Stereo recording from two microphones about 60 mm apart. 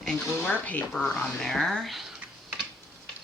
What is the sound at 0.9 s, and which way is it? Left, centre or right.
Speech, centre.